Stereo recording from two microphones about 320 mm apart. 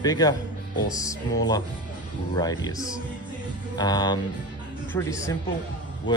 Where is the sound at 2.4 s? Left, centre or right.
Centre.